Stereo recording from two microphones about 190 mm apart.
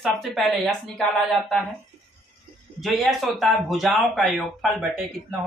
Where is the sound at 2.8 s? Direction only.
Centre (ahead or behind).